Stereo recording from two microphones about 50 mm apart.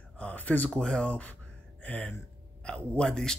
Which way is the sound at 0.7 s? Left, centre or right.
Centre.